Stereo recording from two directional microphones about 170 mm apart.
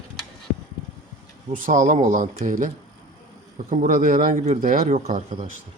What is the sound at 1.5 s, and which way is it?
Speech, 50° right (ahead or behind).